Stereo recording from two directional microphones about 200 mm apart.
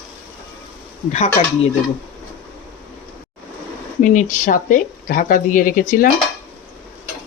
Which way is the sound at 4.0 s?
40° left (ahead or behind).